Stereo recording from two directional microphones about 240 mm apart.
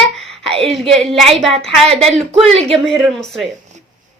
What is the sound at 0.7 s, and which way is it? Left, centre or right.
A woman's voice, centre.